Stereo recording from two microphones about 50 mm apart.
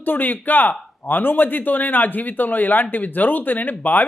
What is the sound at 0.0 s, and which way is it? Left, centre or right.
Speech, left.